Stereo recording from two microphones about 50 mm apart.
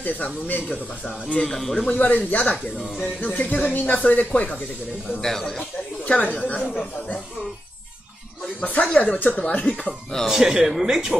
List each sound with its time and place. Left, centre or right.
0.0 s speech: left
1.3 s a man's voice: centre
1.6 s a man's voice: centre
1.9 s speech: left
5.2 s a man's voice: centre
6.0 s speech: left
8.6 s speech: left
10.2 s speech: centre